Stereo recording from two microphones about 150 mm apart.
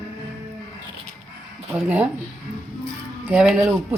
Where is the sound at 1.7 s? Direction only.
10° right (ahead or behind).